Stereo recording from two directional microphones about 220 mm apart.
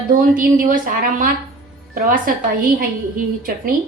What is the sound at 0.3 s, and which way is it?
Speech, 40° right (ahead or behind).